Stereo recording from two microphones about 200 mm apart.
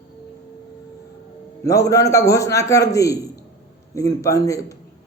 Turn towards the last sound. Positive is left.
turn(degrees=15)  # may be behind; listen again after turning